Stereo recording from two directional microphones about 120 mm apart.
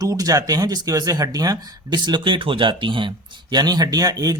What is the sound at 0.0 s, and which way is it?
Speech, 30° right (ahead or behind).